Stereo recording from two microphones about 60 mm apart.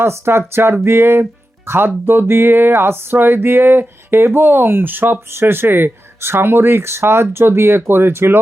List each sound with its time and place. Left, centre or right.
0.0 s speech: right
2.0 s music: right